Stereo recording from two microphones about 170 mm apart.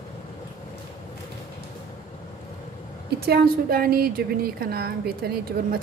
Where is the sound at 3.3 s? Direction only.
60° right (ahead or behind).